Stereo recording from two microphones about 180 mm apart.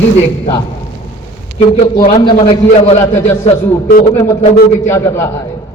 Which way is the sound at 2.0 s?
25° left (ahead or behind).